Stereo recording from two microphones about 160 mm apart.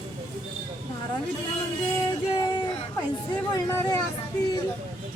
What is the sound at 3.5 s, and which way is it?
Vehicle, 20° left (ahead or behind).